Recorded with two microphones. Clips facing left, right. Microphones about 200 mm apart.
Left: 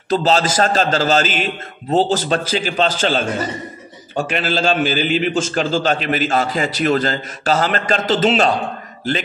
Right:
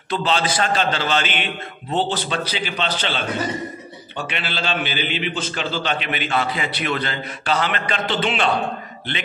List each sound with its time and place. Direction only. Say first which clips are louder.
0.1 s a man's voice: left 5 dB; 40° left (ahead or behind)